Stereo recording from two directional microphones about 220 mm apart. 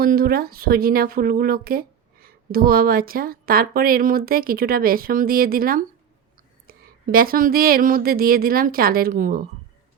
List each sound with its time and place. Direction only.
0.0 s speech: 40° right (ahead or behind)